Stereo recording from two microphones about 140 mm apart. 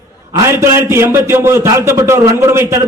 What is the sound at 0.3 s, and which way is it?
A man's voice, 20° right (ahead or behind).